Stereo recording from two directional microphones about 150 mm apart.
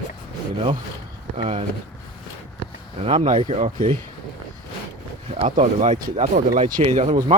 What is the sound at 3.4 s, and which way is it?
Speech, 55° right (ahead or behind).